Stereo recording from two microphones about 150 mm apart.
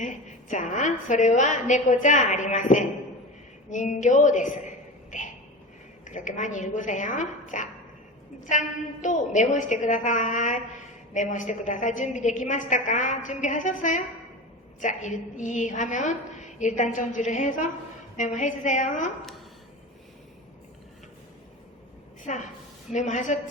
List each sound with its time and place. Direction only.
0.0 s a woman's voice: 55° left (ahead or behind)
6.1 s a woman's voice: 55° left (ahead or behind)
22.2 s a woman's voice: 55° left (ahead or behind)